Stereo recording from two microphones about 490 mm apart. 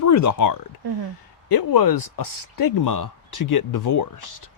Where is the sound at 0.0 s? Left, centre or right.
Left.